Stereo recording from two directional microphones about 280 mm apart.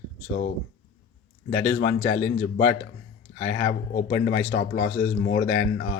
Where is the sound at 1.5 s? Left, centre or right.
Left.